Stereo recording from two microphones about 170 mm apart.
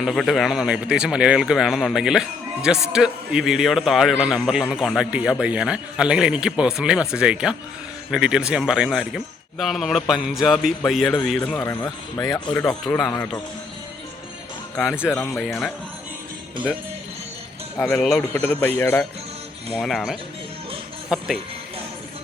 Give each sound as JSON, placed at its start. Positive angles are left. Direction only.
{"t": 0.0, "sound": "a man's voice", "side_deg": 0}
{"t": 14.8, "sound": "speech", "side_deg": -5}
{"t": 17.9, "sound": "a man's voice", "side_deg": 0}
{"t": 19.7, "sound": "speech", "side_deg": 0}